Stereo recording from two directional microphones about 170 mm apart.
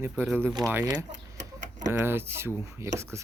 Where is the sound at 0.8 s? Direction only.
25° right (ahead or behind).